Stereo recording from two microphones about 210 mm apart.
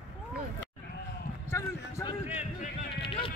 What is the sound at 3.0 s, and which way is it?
Run, 25° left (ahead or behind).